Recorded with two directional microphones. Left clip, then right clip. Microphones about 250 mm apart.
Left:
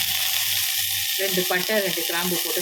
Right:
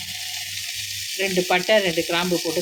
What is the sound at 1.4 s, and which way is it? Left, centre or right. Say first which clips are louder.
Frying: right 4 dB; centre.